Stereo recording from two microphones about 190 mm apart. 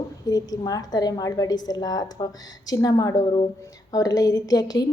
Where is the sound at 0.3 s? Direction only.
20° left (ahead or behind).